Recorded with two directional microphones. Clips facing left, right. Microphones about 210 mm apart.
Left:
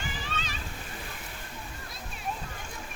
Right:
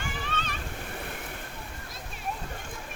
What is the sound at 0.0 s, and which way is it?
Waterfall, 55° right (ahead or behind).